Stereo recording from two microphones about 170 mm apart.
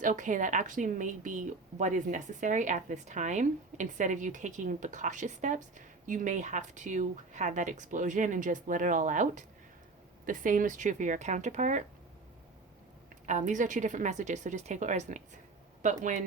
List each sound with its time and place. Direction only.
0.0 s a woman's voice: 50° right (ahead or behind)
13.2 s a woman's voice: 45° right (ahead or behind)